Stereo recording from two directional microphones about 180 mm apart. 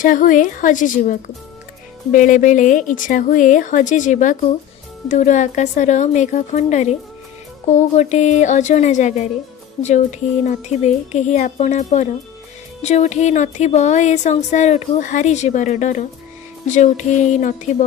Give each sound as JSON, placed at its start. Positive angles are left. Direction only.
{"t": 0.0, "sound": "speech", "side_deg": 45}